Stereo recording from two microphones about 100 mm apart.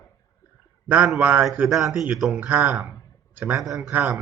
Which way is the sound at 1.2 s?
15° right (ahead or behind).